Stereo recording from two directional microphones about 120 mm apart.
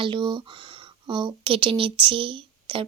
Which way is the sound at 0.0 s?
40° right (ahead or behind).